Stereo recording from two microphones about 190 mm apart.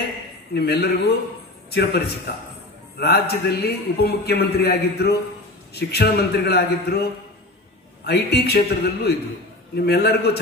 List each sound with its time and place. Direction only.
0.6 s a man's voice: 60° left (ahead or behind)